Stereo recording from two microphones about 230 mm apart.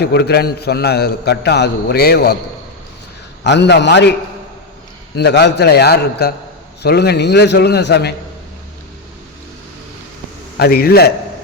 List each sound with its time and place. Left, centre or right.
0.0 s a man's voice: left
3.4 s a man's voice: left
5.1 s a man's voice: left
10.6 s a man's voice: left